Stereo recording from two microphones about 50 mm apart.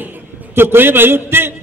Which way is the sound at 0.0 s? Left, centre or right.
Right.